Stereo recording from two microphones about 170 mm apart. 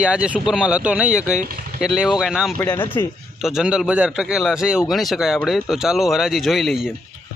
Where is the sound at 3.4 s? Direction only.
5° right (ahead or behind).